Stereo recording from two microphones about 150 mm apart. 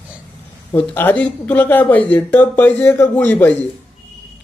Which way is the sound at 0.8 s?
10° left (ahead or behind).